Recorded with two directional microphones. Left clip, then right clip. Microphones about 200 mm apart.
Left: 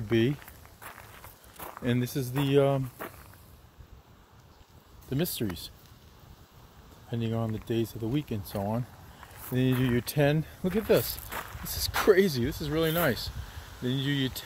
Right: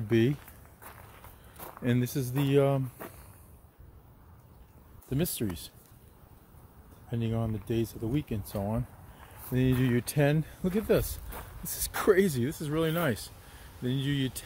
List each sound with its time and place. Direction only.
0.1 s speech: 15° right (ahead or behind)
1.6 s a sound: centre (ahead or behind)
1.9 s speech: 15° right (ahead or behind)
5.1 s speech: centre (ahead or behind)
7.1 s speech: centre (ahead or behind)